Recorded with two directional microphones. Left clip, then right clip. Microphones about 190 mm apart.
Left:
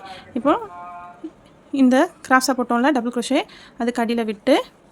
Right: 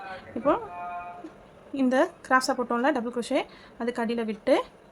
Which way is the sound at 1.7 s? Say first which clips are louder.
Left 7 dB; 55° left (ahead or behind).